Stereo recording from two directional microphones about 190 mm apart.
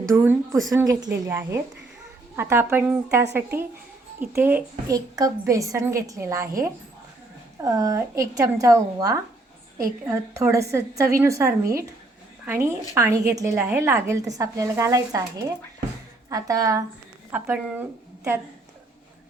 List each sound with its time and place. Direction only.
0.2 s a woman's voice: 10° right (ahead or behind)
7.6 s a woman's voice: 15° right (ahead or behind)